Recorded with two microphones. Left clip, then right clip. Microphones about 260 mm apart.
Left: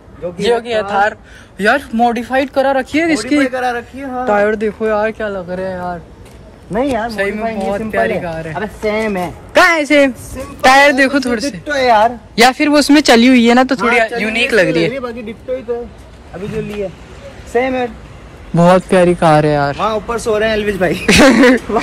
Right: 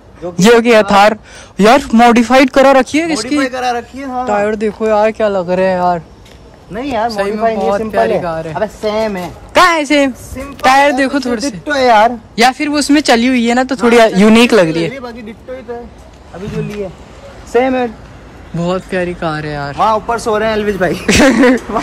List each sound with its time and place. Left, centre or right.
0.4 s a man's voice: centre
3.4 s a man's voice: right
4.3 s speech: centre
9.2 s speech: centre
11.6 s a man's voice: right
12.4 s speech: centre
13.8 s speech: right; by 15.3 s centre
17.5 s speech: centre
18.6 s speech: centre
19.4 s speech: centre
20.1 s speech: right; by 21.5 s centre